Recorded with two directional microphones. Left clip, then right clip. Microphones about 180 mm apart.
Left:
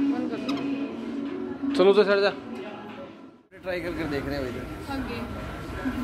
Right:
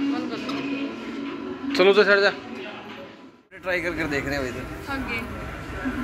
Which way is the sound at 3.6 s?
15° right (ahead or behind).